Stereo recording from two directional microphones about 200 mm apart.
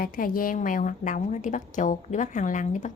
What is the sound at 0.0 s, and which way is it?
A woman's voice, 45° left (ahead or behind).